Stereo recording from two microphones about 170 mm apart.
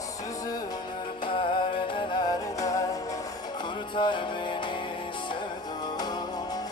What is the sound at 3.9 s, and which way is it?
Music, 30° left (ahead or behind).